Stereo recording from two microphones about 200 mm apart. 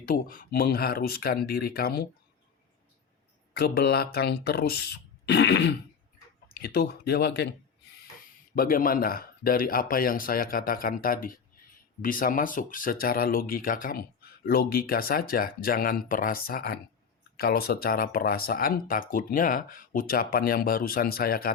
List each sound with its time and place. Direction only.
0.0 s speech: 45° left (ahead or behind)
3.5 s speech: 50° left (ahead or behind)
8.5 s speech: 45° left (ahead or behind)